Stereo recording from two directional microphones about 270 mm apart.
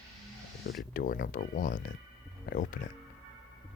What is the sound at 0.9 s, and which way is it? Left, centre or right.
Speech, left.